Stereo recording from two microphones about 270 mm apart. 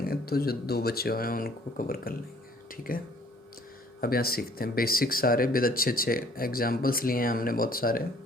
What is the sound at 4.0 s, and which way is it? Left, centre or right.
Speech, left.